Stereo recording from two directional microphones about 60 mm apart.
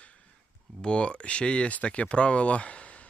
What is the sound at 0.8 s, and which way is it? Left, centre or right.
Speech, centre.